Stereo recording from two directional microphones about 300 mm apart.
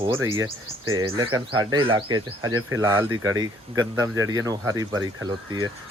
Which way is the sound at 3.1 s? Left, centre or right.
Right.